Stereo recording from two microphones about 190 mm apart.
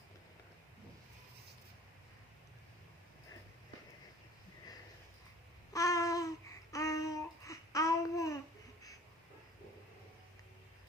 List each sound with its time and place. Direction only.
5.7 s babbling: 15° left (ahead or behind)